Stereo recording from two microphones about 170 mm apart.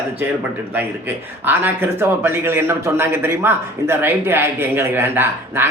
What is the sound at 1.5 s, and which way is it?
Speech, 10° right (ahead or behind).